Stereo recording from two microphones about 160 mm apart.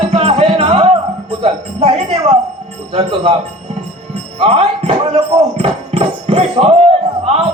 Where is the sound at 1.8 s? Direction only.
35° right (ahead or behind).